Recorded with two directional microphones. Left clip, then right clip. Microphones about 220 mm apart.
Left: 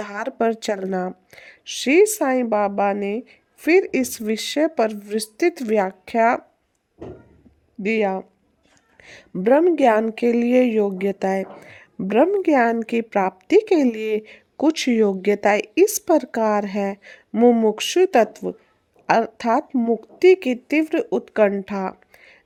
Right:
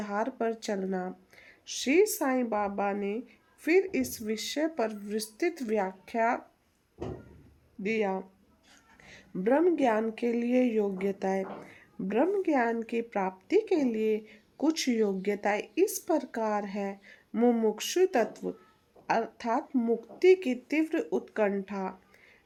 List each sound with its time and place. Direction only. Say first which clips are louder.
0.0 s speech: left 8 dB; 50° left (ahead or behind)
7.8 s speech: left 9 dB; 50° left (ahead or behind)